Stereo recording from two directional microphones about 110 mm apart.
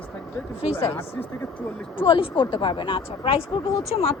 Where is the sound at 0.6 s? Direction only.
60° left (ahead or behind).